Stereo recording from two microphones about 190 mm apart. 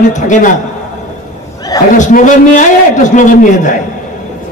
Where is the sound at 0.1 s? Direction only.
40° left (ahead or behind).